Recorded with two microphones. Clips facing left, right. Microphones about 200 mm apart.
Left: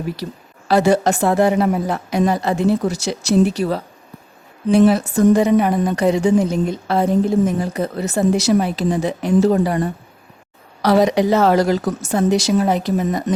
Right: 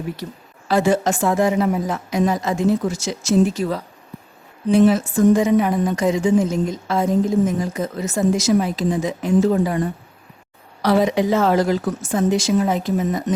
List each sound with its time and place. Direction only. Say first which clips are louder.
0.7 s a woman's voice: left 3 dB; 70° left (ahead or behind)
5.0 s a woman's voice: left 2 dB; 65° left (ahead or behind)
10.8 s a woman's voice: left 3 dB; 80° left